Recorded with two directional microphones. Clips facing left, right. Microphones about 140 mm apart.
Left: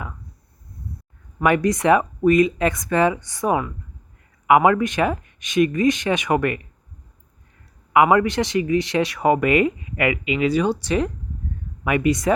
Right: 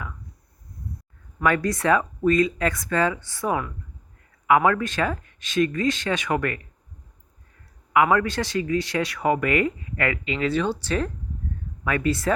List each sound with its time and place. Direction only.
1.4 s speech: 20° left (ahead or behind)
7.9 s speech: 20° left (ahead or behind)